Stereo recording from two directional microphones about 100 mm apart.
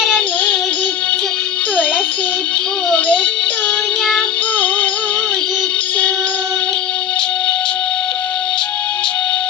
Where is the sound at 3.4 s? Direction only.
10° left (ahead or behind).